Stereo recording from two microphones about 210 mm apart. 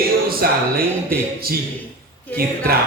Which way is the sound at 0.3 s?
45° right (ahead or behind).